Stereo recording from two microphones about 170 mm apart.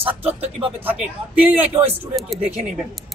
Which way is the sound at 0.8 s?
10° right (ahead or behind).